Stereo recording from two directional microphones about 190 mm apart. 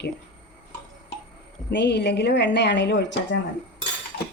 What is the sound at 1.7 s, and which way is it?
A woman's voice, 65° left (ahead or behind).